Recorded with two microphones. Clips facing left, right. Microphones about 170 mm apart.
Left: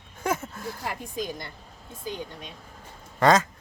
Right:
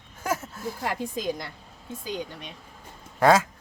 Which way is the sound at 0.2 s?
Centre (ahead or behind).